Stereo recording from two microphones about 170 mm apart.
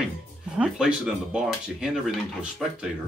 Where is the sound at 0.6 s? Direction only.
5° right (ahead or behind).